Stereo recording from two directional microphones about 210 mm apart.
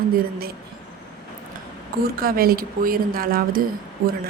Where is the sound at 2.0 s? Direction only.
45° right (ahead or behind).